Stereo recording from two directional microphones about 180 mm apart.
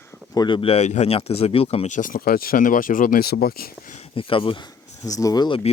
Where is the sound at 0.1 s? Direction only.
25° left (ahead or behind); by 4.0 s 50° left (ahead or behind).